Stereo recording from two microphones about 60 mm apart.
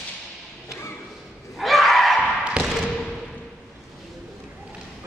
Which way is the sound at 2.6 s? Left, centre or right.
Centre.